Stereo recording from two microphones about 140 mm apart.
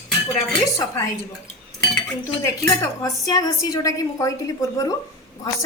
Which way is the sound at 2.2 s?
20° left (ahead or behind).